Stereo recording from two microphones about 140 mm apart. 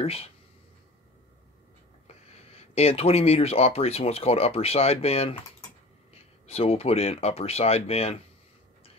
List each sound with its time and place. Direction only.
0.0 s speech: 45° left (ahead or behind)
2.0 s speech: 45° left (ahead or behind)